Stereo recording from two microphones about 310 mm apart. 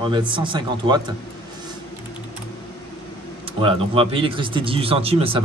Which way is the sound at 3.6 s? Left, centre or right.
Centre.